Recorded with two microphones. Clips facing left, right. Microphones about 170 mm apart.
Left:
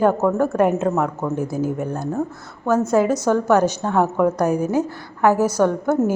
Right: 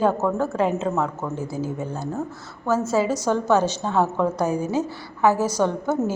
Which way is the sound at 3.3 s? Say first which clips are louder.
Left 2 dB; 10° left (ahead or behind).